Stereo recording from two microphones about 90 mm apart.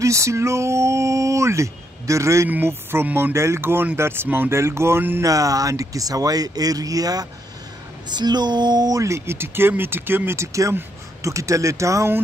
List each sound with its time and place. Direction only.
0.0 s speech: 35° right (ahead or behind)
5.2 s speech: 40° right (ahead or behind)